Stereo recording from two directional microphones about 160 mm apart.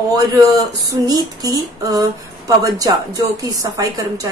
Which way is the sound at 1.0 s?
25° right (ahead or behind).